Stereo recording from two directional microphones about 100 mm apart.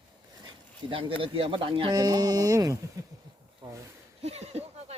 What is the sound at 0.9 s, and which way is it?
Speech, 60° right (ahead or behind).